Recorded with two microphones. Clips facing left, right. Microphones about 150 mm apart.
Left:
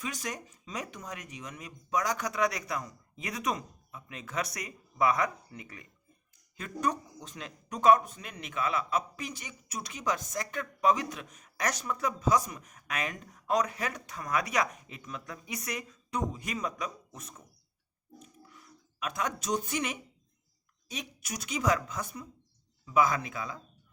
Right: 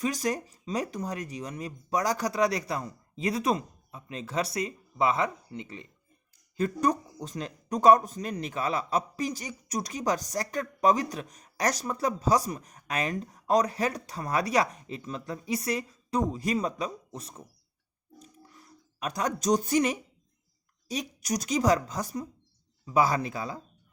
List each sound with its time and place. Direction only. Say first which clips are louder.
0.0 s speech: right 9 dB; 35° right (ahead or behind)
6.6 s speech: right 6 dB; 40° right (ahead or behind)
18.2 s a sound: right 4 dB; 35° right (ahead or behind)
20.8 s speech: right 8 dB; 35° right (ahead or behind)